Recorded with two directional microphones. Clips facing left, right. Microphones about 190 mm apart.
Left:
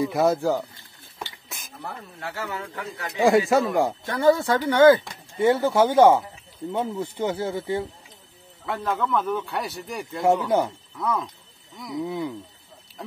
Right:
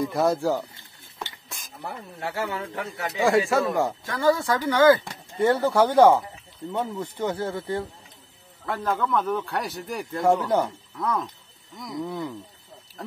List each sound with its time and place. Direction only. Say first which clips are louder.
0.0 s speech: left 2 dB; centre (ahead or behind)
2.1 s a man's voice: right 4 dB; 25° right (ahead or behind)
3.2 s speech: left 3 dB; 20° left (ahead or behind)
4.0 s speech: left 4 dB; 25° left (ahead or behind)
5.4 s speech: left 1 dB; centre (ahead or behind)